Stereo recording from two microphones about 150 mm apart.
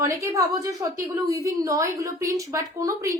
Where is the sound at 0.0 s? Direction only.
20° right (ahead or behind).